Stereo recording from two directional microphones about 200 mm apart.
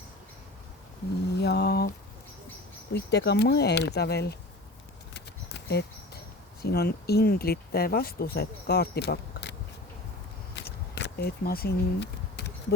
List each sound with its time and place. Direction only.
1.4 s mantra: 55° left (ahead or behind)
2.9 s speech: 55° left (ahead or behind)
5.1 s a sound: 60° left (ahead or behind)
6.6 s speech: 50° left (ahead or behind)
10.9 s speech: 55° left (ahead or behind)